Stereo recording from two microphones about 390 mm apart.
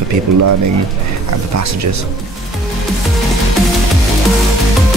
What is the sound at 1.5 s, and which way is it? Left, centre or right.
Speech, right.